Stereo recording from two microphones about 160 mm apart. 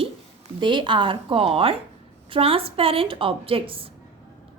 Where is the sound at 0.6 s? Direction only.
30° right (ahead or behind).